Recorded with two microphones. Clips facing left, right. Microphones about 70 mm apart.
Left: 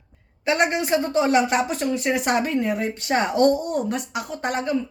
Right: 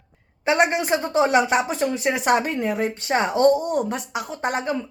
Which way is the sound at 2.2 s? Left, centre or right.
Right.